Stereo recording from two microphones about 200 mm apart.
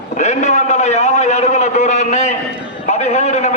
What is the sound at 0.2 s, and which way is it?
A man's voice, 35° left (ahead or behind).